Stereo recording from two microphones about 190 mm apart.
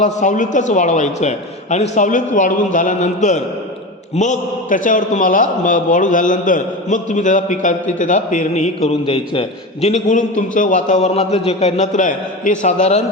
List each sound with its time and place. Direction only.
0.0 s a man's voice: 40° left (ahead or behind)